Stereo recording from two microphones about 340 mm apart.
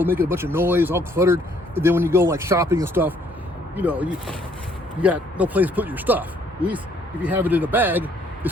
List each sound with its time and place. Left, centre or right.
0.0 s speech: centre